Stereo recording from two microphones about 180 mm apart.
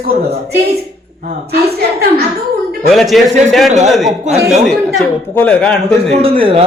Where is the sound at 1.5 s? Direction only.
60° right (ahead or behind).